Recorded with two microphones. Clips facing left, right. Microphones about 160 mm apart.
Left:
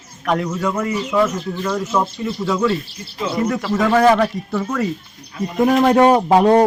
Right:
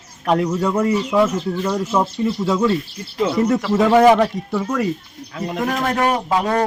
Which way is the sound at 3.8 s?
15° right (ahead or behind).